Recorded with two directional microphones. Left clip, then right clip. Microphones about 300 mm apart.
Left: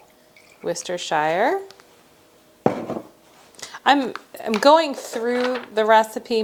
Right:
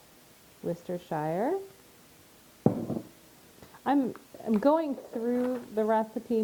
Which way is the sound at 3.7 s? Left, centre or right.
Centre.